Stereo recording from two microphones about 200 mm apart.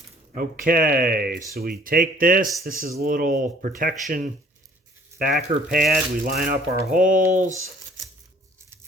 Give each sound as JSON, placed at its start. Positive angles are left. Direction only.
{"t": 0.3, "sound": "speech", "side_deg": -45}
{"t": 5.2, "sound": "speech", "side_deg": -45}